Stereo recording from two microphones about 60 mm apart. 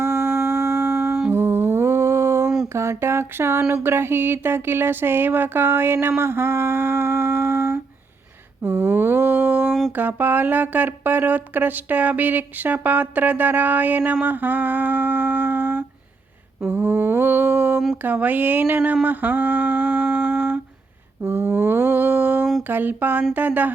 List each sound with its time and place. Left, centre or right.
0.0 s a sound: right
1.3 s music: right
2.7 s a sound: right
3.8 s speech: right
16.6 s a sound: right
17.9 s speech: right
19.0 s humming: right
21.2 s mantra: right
22.6 s speech: right